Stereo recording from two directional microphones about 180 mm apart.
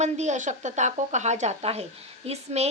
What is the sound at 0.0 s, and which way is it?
Speech, 40° right (ahead or behind).